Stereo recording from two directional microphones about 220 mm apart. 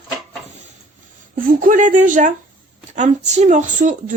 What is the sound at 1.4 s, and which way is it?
A woman's voice, 40° right (ahead or behind).